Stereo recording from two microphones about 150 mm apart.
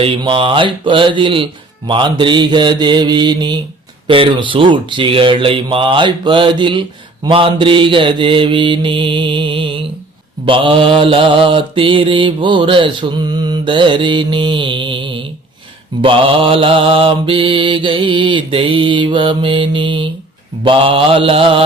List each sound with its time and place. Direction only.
0.0 s mantra: 35° right (ahead or behind)